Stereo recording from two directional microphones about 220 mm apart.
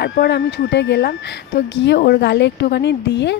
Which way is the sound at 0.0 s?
45° left (ahead or behind).